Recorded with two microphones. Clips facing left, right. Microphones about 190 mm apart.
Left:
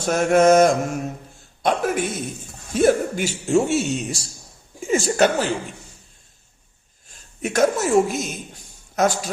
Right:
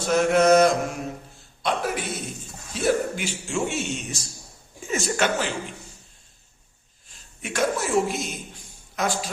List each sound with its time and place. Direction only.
0.0 s speech: 50° left (ahead or behind)
7.4 s speech: 40° left (ahead or behind)